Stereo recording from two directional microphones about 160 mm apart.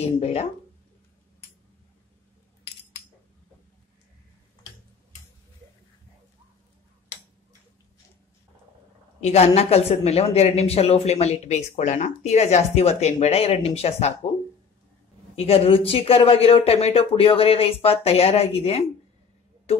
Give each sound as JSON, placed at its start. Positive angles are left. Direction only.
{"t": 0.0, "sound": "a woman's voice", "side_deg": 40}
{"t": 9.2, "sound": "a woman's voice", "side_deg": 40}
{"t": 15.3, "sound": "a woman's voice", "side_deg": 40}